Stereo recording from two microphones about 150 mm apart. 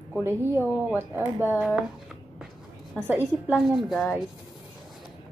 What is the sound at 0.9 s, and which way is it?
Speech, 15° right (ahead or behind).